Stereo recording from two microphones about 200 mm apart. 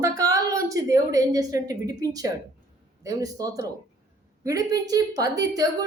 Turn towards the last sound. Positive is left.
turn(degrees=-20)  # may be behind; listen again after turning